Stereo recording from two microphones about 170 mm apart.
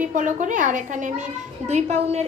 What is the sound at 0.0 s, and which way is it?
A woman's voice, 50° right (ahead or behind).